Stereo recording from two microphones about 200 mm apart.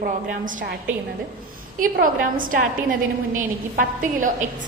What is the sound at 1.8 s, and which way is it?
A woman's voice, 45° right (ahead or behind).